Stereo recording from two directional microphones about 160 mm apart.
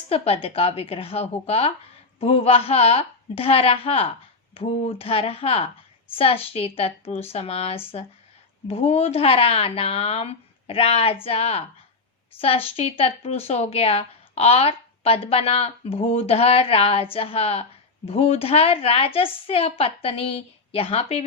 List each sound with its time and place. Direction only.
0.1 s speech: 35° left (ahead or behind)